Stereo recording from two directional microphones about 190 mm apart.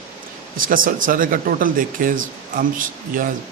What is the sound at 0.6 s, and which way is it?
Speech, 45° right (ahead or behind).